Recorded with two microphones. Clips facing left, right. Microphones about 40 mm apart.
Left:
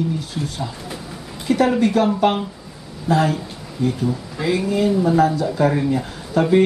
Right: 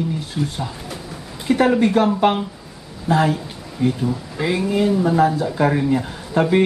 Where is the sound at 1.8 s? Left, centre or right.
Right.